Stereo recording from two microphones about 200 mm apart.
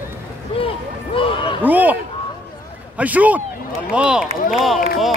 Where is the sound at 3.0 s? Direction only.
5° right (ahead or behind).